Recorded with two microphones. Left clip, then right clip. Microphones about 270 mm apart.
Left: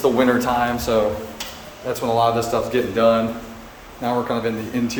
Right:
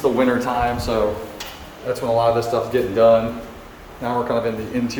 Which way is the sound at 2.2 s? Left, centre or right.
Centre.